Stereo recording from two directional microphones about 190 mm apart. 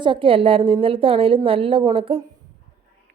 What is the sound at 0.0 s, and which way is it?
Speech, 25° right (ahead or behind).